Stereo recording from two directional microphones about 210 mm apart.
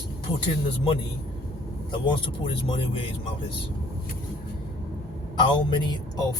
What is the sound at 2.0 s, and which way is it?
Speech, 25° left (ahead or behind).